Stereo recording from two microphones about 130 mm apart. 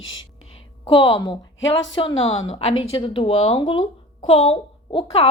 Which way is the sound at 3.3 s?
55° left (ahead or behind).